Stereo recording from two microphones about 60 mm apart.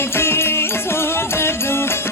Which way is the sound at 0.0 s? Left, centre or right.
Left.